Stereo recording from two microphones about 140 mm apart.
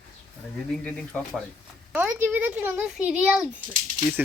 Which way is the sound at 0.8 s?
10° left (ahead or behind).